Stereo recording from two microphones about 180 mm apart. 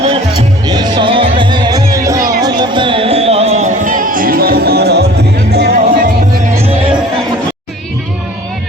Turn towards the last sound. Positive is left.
turn(degrees=-30)  # may be behind; listen again after turning